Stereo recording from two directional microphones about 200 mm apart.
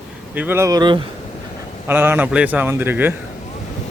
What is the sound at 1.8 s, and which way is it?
A man's voice, 10° right (ahead or behind).